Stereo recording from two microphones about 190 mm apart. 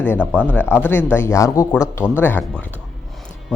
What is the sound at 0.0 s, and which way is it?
Speech, 10° left (ahead or behind).